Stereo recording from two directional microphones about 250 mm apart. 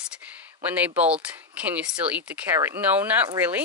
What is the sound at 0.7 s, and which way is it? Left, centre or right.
Speech, centre.